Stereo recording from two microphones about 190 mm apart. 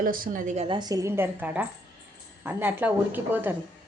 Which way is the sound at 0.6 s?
25° right (ahead or behind).